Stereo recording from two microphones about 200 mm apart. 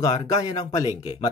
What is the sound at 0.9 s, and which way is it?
Speech, 15° right (ahead or behind).